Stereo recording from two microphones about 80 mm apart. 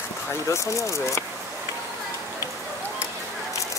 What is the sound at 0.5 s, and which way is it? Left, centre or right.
Speech, left.